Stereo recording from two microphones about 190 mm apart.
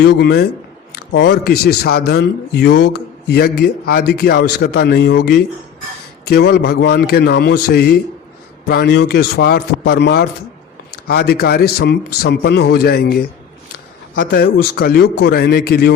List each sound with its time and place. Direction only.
0.0 s a man's voice: 60° left (ahead or behind)
14.3 s a man's voice: 50° left (ahead or behind)